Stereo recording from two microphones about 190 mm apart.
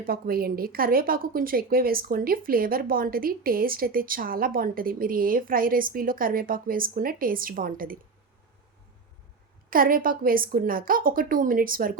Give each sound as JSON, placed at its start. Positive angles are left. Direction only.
{"t": 0.0, "sound": "a woman's voice", "side_deg": -50}
{"t": 9.6, "sound": "a woman's voice", "side_deg": -50}